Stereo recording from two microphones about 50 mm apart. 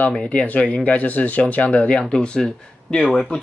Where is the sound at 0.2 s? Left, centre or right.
Left.